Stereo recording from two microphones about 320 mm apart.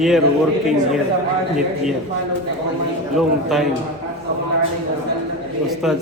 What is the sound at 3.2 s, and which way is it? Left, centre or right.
Speech, centre.